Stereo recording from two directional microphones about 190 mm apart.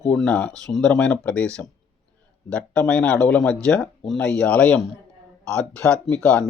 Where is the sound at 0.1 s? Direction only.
5° left (ahead or behind).